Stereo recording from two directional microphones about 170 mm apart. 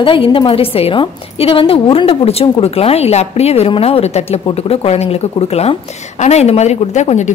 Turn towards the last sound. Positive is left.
turn(degrees=45)  # may be behind; listen again after turning